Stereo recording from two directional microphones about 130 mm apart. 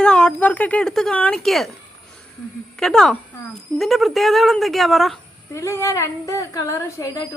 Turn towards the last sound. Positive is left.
turn(degrees=25)  # may be behind; listen again after turning